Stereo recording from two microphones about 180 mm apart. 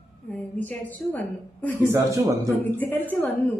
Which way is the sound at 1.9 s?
15° right (ahead or behind).